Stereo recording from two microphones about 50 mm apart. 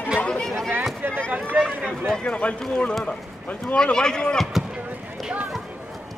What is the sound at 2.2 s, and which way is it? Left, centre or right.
A man's voice, left.